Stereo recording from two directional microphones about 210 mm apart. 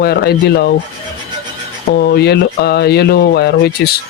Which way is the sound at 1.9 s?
50° left (ahead or behind).